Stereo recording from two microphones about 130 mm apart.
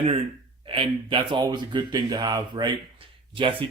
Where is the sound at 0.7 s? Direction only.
45° right (ahead or behind).